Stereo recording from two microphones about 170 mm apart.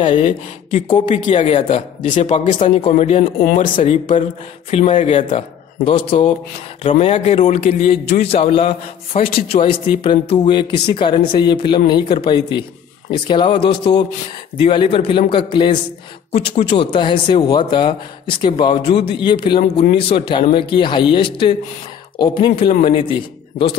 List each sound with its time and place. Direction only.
0.0 s a man's voice: 30° left (ahead or behind)
3.3 s speech: 55° left (ahead or behind)
3.7 s a man's voice: 40° left (ahead or behind)